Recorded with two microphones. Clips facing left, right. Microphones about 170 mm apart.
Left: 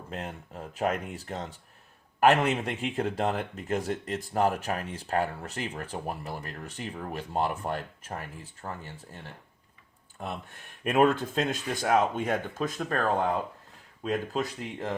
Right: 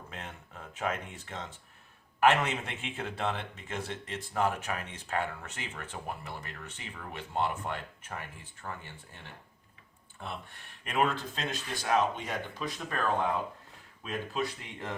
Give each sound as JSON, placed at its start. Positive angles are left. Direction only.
{"t": 0.1, "sound": "speech", "side_deg": 35}
{"t": 10.8, "sound": "speech", "side_deg": 50}
{"t": 14.0, "sound": "speech", "side_deg": 40}